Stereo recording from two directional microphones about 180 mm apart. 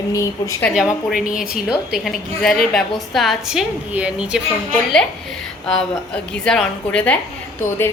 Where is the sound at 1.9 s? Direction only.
Centre (ahead or behind).